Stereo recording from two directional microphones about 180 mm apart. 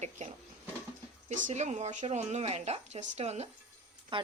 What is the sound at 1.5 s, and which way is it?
Speech, 40° right (ahead or behind).